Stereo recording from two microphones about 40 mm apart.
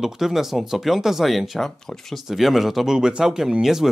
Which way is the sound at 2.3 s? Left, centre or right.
Centre.